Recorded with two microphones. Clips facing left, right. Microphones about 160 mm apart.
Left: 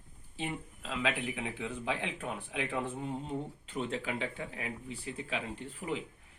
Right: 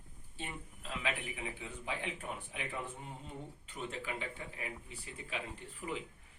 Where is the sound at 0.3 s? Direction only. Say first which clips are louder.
Left 7 dB; 90° left.